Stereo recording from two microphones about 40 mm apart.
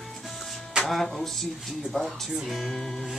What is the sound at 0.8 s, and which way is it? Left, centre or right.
Speech, centre.